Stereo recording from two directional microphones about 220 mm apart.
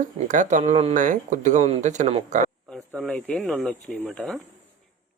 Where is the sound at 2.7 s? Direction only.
5° left (ahead or behind).